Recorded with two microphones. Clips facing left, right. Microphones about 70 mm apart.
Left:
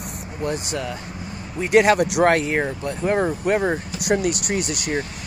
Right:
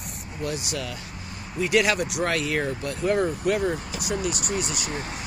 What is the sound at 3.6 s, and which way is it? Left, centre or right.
Speech, left.